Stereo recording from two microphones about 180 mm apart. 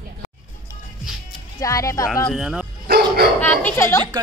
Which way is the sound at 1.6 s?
15° left (ahead or behind).